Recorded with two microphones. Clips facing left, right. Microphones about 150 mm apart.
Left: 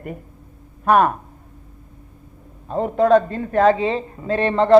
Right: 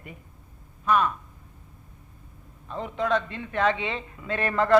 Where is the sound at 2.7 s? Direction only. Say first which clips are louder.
Left 11 dB; 45° left (ahead or behind).